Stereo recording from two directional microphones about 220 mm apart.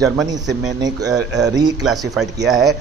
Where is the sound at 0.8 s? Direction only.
15° right (ahead or behind).